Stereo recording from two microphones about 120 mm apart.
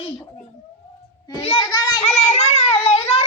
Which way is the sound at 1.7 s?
35° left (ahead or behind).